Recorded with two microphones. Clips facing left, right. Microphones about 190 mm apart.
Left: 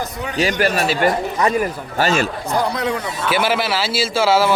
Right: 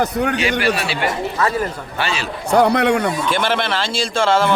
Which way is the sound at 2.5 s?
65° right (ahead or behind).